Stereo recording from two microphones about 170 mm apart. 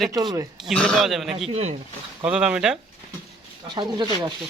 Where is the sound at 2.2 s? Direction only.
5° right (ahead or behind).